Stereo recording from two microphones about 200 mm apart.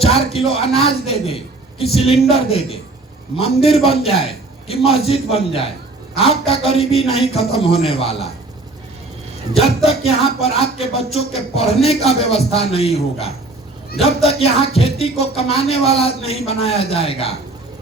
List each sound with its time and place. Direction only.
0.0 s speech: 30° left (ahead or behind)
9.6 s speech: 30° left (ahead or behind)